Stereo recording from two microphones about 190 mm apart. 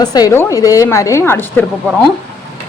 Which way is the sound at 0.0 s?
20° left (ahead or behind).